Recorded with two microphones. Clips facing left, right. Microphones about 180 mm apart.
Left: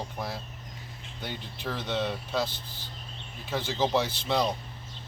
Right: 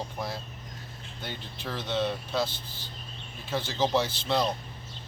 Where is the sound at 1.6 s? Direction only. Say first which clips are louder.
Right 1 dB; 10° left (ahead or behind).